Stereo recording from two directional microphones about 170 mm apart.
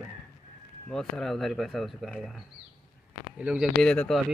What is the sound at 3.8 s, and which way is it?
Speech, 5° left (ahead or behind).